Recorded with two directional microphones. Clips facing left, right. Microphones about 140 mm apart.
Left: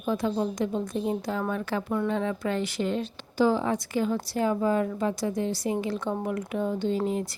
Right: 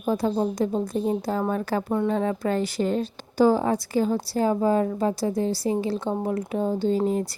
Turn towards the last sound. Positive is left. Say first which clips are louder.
# right 4 dB
turn(degrees=-40)  # may be behind; listen again after turning